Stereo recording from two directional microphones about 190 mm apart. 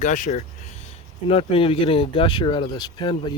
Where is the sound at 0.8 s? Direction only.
30° left (ahead or behind).